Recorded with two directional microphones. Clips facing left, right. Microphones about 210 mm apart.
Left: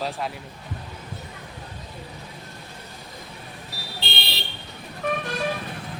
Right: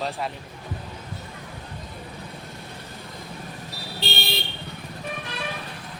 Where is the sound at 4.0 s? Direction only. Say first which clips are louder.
Right 5 dB; 45° right (ahead or behind).